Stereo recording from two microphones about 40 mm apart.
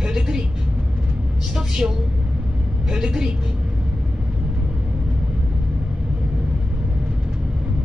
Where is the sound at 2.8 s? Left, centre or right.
Centre.